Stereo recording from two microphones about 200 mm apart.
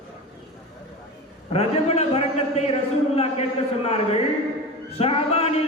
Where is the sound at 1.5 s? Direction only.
30° left (ahead or behind).